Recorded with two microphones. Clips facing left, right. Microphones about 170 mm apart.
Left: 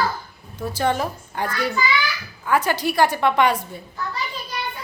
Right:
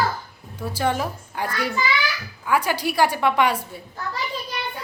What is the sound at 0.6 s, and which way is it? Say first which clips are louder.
A woman's voice: left 1 dB; 10° right (ahead or behind).